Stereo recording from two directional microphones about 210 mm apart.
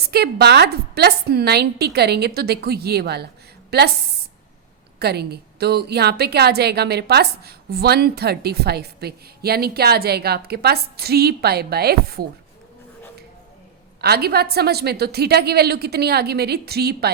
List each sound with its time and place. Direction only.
0.1 s a woman's voice: 50° right (ahead or behind)
4.9 s a woman's voice: 50° right (ahead or behind)
14.0 s a woman's voice: 50° right (ahead or behind)